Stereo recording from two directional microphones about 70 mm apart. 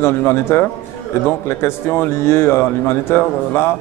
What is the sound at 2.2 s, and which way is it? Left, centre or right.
A man's voice, left.